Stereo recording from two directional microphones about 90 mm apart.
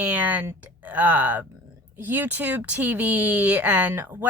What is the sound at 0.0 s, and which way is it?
Speech, 15° right (ahead or behind).